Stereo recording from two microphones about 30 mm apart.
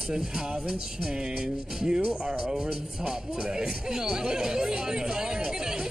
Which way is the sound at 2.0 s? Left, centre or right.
Right.